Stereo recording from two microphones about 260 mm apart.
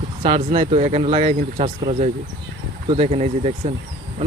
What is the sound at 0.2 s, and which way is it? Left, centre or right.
Speech, right.